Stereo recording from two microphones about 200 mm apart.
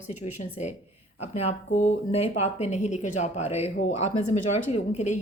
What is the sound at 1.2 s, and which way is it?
A woman's voice, 35° left (ahead or behind).